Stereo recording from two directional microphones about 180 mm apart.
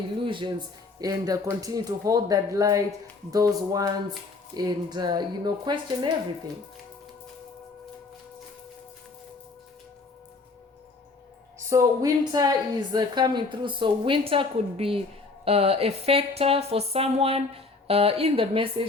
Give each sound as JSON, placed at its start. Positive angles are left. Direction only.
{"t": 0.3, "sound": "a woman's voice", "side_deg": -25}
{"t": 11.7, "sound": "a woman's voice", "side_deg": -20}